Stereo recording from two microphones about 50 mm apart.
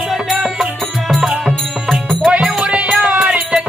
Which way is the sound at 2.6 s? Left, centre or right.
Right.